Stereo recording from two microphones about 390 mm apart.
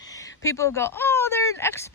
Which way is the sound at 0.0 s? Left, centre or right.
Centre.